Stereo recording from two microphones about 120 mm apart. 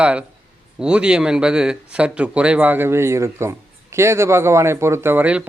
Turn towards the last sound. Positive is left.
turn(degrees=-10)  # may be behind; listen again after turning